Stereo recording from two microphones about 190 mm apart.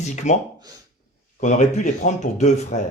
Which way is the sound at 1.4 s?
40° left (ahead or behind).